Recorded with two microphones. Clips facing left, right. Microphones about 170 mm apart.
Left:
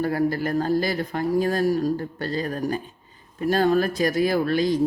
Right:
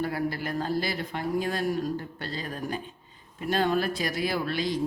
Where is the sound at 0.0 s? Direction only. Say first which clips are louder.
Left 7 dB; 45° left (ahead or behind).